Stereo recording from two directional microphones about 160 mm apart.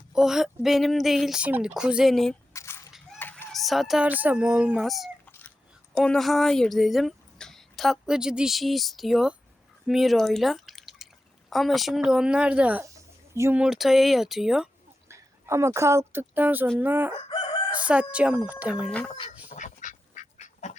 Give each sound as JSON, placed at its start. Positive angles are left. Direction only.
{"t": 0.1, "sound": "speech", "side_deg": -5}
{"t": 2.5, "sound": "a sound", "side_deg": 15}
{"t": 3.2, "sound": "chicken", "side_deg": 10}
{"t": 3.5, "sound": "speech", "side_deg": 0}
{"t": 13.6, "sound": "speech", "side_deg": 0}
{"t": 15.1, "sound": "a woman's voice", "side_deg": -15}
{"t": 17.7, "sound": "chicken", "side_deg": -10}
{"t": 18.1, "sound": "speech", "side_deg": -10}
{"t": 18.9, "sound": "speech", "side_deg": 5}
{"t": 19.5, "sound": "duck", "side_deg": 50}